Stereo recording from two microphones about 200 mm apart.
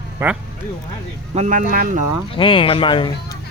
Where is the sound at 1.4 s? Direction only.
40° right (ahead or behind).